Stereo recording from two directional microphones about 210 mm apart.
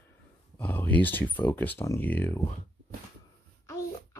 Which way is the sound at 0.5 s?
5° left (ahead or behind).